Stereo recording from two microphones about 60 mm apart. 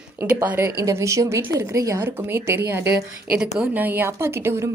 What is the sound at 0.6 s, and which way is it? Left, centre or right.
Speech, right.